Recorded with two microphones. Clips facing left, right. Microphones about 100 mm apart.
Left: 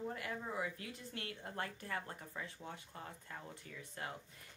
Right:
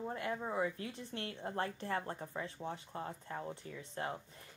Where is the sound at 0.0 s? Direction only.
30° right (ahead or behind).